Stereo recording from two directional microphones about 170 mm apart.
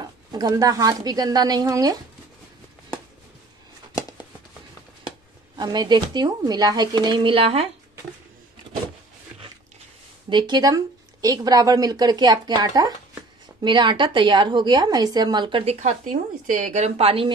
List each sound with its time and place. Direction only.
0.0 s a woman's voice: 25° right (ahead or behind)
5.6 s a woman's voice: 25° right (ahead or behind)
10.3 s a woman's voice: 25° right (ahead or behind)